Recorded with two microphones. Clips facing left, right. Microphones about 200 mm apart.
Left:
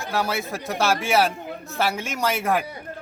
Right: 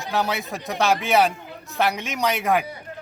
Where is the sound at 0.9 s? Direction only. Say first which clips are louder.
Right 2 dB; 20° right (ahead or behind).